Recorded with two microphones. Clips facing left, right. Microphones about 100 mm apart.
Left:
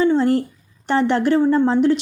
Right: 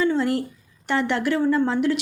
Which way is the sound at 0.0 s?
30° left (ahead or behind).